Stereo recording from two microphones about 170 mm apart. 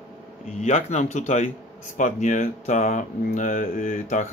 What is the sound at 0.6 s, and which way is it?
Speech, 45° left (ahead or behind).